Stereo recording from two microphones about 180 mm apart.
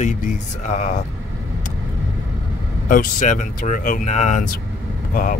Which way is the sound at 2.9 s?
45° left (ahead or behind).